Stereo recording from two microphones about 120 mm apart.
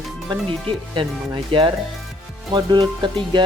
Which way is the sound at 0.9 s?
45° right (ahead or behind).